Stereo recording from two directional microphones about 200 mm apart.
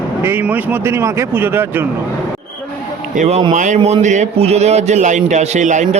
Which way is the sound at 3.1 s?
35° right (ahead or behind).